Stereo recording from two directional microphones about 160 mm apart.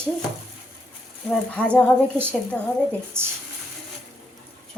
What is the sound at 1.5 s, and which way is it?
Speech, 5° left (ahead or behind).